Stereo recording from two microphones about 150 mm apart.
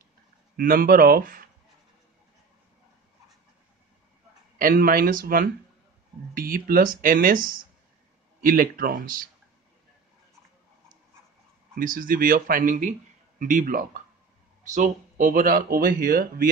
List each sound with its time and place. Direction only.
0.6 s speech: 70° right (ahead or behind)
4.6 s speech: 70° right (ahead or behind)
11.7 s speech: 65° right (ahead or behind)
14.6 s speech: 55° right (ahead or behind); by 16.4 s 75° right (ahead or behind)